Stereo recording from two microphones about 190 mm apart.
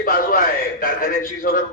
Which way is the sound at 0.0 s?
50° left (ahead or behind).